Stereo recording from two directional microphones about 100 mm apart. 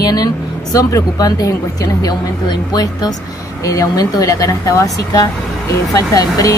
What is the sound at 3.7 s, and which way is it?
Speech, 35° left (ahead or behind).